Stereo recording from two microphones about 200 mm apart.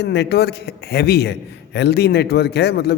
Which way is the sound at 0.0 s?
55° left (ahead or behind).